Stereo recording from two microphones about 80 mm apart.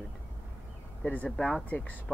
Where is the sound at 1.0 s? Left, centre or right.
Centre.